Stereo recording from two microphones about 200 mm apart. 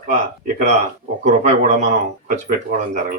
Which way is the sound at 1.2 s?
35° right (ahead or behind).